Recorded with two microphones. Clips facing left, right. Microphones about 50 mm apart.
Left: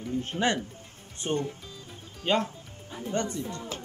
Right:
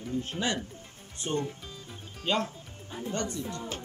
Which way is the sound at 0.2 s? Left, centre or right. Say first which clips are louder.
Left 6 dB; left.